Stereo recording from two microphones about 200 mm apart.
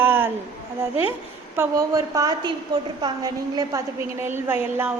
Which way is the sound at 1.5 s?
15° right (ahead or behind).